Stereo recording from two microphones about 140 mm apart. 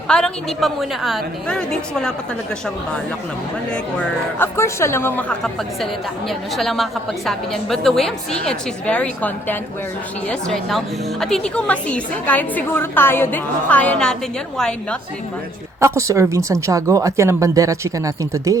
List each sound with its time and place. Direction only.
0.1 s a woman's voice: 5° left (ahead or behind)
4.4 s a woman's voice: 20° left (ahead or behind)
5.4 s a woman's voice: centre (ahead or behind)
15.8 s speech: 20° right (ahead or behind)